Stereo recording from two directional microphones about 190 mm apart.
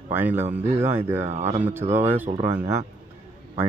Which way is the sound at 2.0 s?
10° right (ahead or behind).